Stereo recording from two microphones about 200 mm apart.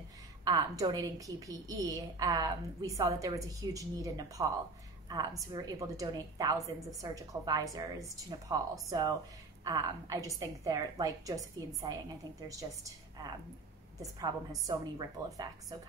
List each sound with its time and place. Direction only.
0.5 s a woman's voice: 20° right (ahead or behind)